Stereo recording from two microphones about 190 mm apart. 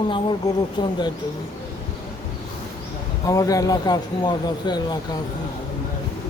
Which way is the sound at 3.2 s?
20° left (ahead or behind).